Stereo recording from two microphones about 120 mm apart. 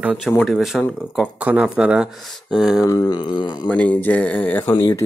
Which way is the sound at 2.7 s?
30° left (ahead or behind).